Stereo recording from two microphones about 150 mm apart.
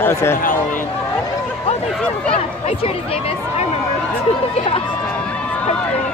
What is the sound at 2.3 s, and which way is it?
Speech, 40° left (ahead or behind).